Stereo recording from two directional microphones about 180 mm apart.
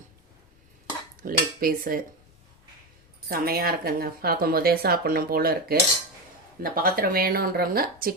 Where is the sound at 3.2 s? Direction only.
55° right (ahead or behind).